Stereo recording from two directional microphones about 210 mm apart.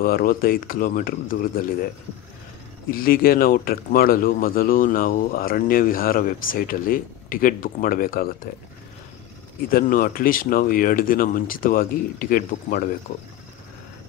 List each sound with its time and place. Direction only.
0.0 s speech: 45° left (ahead or behind)
2.9 s speech: 45° left (ahead or behind)
9.7 s speech: 45° left (ahead or behind)